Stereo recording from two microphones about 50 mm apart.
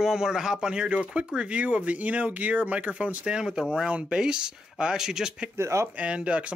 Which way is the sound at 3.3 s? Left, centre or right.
Centre.